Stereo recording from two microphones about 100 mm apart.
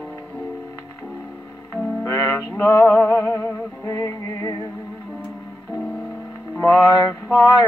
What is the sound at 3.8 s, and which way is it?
Music, 30° left (ahead or behind).